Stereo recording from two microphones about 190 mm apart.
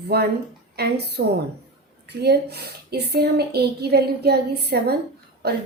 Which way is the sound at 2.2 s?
60° right (ahead or behind).